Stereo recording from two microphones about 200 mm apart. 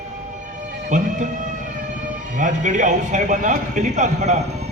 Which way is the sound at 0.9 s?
40° right (ahead or behind).